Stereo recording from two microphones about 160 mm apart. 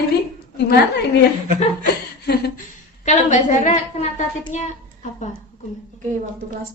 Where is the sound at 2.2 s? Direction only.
90° left.